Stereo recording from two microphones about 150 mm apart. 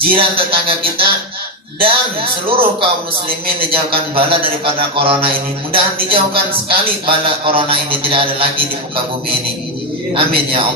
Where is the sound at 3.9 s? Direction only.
35° right (ahead or behind).